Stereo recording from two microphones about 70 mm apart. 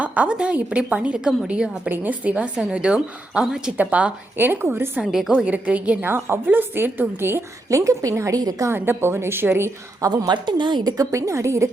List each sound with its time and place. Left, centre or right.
0.0 s a woman's voice: centre
4.4 s a woman's voice: right
5.0 s a woman's voice: centre
5.3 s a woman's voice: centre
6.1 s a woman's voice: right
7.7 s a woman's voice: right
8.4 s a woman's voice: right
8.7 s a woman's voice: right
10.1 s a woman's voice: right